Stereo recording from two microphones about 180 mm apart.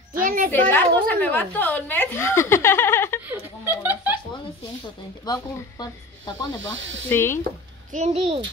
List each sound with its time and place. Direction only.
0.2 s a sound: 50° right (ahead or behind)
0.5 s a woman's voice: 10° left (ahead or behind)
3.3 s chuckle: 10° right (ahead or behind)
5.2 s speech: 20° left (ahead or behind)
6.6 s speech: 90° right
7.1 s a woman's voice: 15° left (ahead or behind)
7.9 s a child's voice: 35° right (ahead or behind)